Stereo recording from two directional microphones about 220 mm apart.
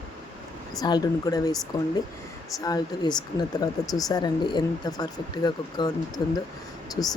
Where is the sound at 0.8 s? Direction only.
20° left (ahead or behind).